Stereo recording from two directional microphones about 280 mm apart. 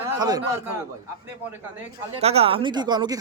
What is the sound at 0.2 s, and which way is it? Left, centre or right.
Speech, centre.